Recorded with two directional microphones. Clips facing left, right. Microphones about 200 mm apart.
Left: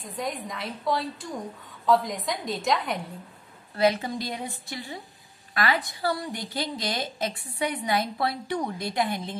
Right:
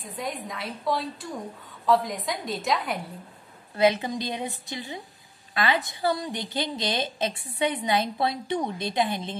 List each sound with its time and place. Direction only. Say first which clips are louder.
0.0 s a woman's voice: left 1 dB; centre (ahead or behind)
3.7 s a woman's voice: right 1 dB; 20° right (ahead or behind)